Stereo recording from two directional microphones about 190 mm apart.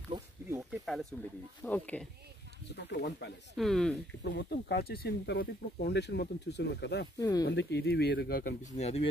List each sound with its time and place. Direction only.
0.1 s a sound: 15° right (ahead or behind)
0.7 s snake: centre (ahead or behind)
1.6 s speech: 10° left (ahead or behind)
2.7 s speech: 60° left (ahead or behind)
3.5 s speech: centre (ahead or behind)
4.2 s speech: 55° left (ahead or behind)
7.2 s speech: 20° left (ahead or behind)
7.4 s speech: 65° left (ahead or behind); by 9.0 s 35° left (ahead or behind)